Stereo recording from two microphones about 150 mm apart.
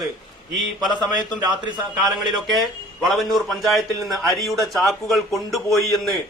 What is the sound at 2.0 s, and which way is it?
A man's voice, centre (ahead or behind).